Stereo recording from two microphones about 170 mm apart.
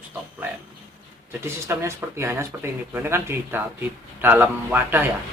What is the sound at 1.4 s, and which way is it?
A man's voice, 15° right (ahead or behind).